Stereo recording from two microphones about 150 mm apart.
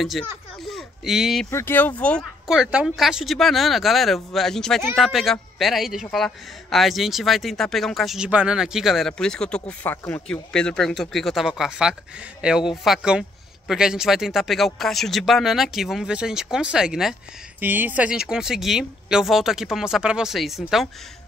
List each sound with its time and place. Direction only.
0.0 s speech: centre (ahead or behind)
1.5 s speech: 15° left (ahead or behind)
2.4 s speech: 5° right (ahead or behind)